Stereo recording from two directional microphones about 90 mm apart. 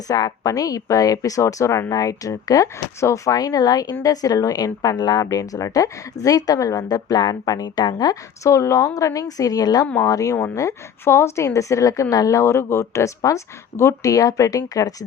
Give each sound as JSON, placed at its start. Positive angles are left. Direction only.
{"t": 0.1, "sound": "a woman's voice", "side_deg": 45}